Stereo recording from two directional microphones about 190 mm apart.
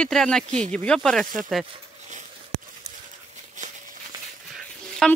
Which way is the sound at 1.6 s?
25° right (ahead or behind).